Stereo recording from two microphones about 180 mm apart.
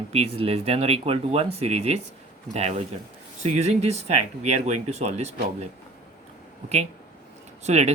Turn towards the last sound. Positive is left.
turn(degrees=-40)  # may be behind; listen again after turning